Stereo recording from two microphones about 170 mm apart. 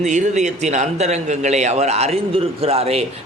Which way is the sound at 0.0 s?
45° right (ahead or behind).